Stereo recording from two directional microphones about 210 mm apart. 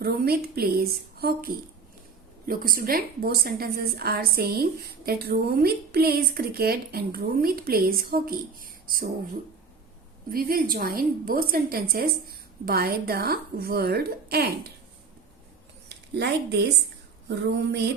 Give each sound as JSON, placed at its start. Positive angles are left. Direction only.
{"t": 0.0, "sound": "a woman's voice", "side_deg": -50}
{"t": 10.3, "sound": "a woman's voice", "side_deg": -45}
{"t": 15.9, "sound": "a woman's voice", "side_deg": -50}